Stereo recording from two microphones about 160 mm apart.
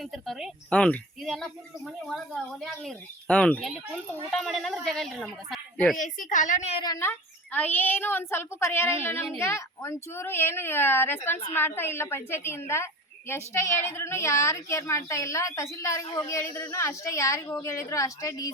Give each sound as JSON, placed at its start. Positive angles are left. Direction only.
{"t": 0.0, "sound": "a woman's voice", "side_deg": 0}
{"t": 6.0, "sound": "a woman's voice", "side_deg": 55}
{"t": 6.8, "sound": "a woman's voice", "side_deg": 20}